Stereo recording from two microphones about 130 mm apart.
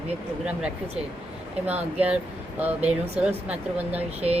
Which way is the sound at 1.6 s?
10° right (ahead or behind).